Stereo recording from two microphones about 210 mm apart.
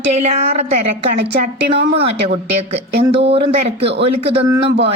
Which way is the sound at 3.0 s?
25° right (ahead or behind).